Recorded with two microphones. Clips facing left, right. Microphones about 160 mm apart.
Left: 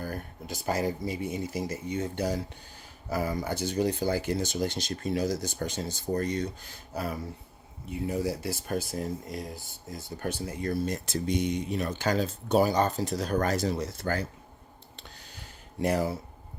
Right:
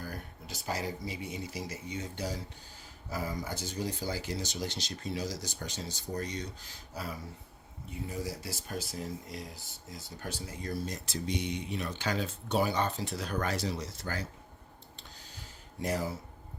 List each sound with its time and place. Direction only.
0.0 s speech: 50° left (ahead or behind)
15.8 s speech: 65° left (ahead or behind)